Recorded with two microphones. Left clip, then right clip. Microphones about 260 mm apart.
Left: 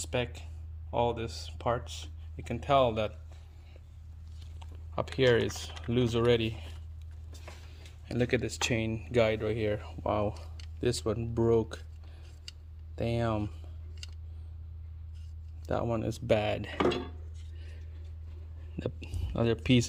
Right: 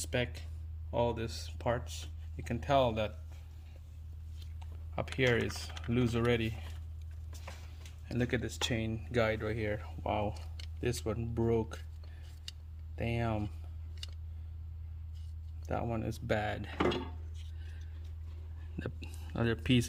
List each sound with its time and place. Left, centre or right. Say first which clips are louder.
0.1 s speech: left 2 dB; centre
5.1 s speech: left 5 dB; centre
8.0 s speech: left 5 dB; centre
13.0 s speech: left 5 dB; centre
15.6 s speech: left 5 dB; centre
18.8 s whispering: left 6 dB; centre